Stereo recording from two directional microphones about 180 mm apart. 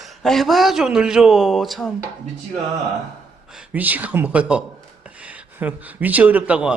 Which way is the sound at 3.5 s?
5° right (ahead or behind).